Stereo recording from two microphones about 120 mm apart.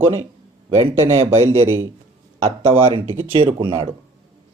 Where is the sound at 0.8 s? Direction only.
25° right (ahead or behind).